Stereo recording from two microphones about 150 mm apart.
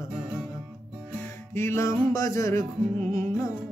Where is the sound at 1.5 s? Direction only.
20° left (ahead or behind).